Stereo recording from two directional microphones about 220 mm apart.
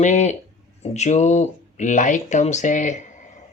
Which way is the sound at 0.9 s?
30° left (ahead or behind).